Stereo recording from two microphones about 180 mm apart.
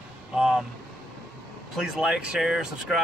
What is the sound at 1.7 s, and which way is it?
Speech, centre (ahead or behind).